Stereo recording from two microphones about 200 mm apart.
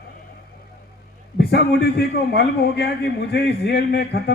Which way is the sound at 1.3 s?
55° left (ahead or behind).